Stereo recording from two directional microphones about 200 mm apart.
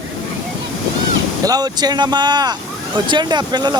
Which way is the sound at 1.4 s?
20° right (ahead or behind).